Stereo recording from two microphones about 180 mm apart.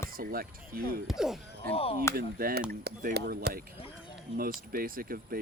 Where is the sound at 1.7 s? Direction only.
30° left (ahead or behind).